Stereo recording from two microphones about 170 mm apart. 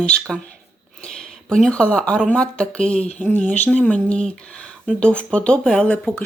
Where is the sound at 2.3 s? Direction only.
5° left (ahead or behind).